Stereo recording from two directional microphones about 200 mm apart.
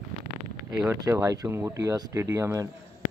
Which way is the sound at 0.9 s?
15° right (ahead or behind).